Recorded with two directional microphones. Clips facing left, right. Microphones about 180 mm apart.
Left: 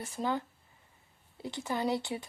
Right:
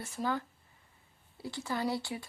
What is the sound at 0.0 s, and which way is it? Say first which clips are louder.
Speech: left 1 dB; 20° left (ahead or behind).